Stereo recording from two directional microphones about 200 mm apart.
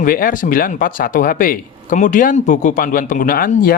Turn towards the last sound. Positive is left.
turn(degrees=45)  # may be behind; listen again after turning